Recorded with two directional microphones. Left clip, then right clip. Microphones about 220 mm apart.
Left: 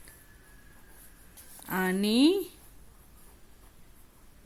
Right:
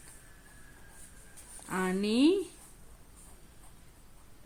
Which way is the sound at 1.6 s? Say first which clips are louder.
Left 3 dB; 25° left (ahead or behind).